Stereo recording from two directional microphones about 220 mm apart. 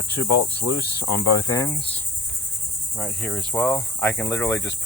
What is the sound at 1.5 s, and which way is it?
Cricket, 15° left (ahead or behind).